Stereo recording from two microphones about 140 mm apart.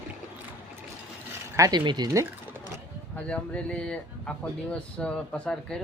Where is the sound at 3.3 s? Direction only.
10° left (ahead or behind).